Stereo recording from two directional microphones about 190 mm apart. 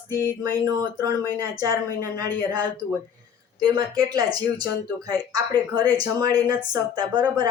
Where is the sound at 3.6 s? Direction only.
20° right (ahead or behind).